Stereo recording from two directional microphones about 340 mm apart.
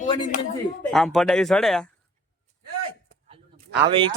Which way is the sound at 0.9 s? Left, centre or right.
Centre.